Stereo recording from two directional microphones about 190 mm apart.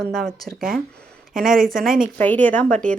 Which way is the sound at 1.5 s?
45° right (ahead or behind).